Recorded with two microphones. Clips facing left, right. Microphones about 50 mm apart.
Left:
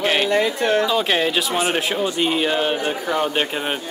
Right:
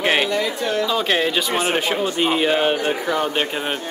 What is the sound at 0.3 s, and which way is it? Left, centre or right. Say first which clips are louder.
Speech: left 3 dB; left.